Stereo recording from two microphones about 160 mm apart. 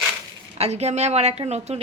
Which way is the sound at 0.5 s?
40° right (ahead or behind).